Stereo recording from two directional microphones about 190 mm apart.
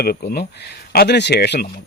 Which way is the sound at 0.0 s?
55° left (ahead or behind).